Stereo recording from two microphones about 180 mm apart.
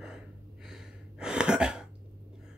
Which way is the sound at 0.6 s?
5° right (ahead or behind).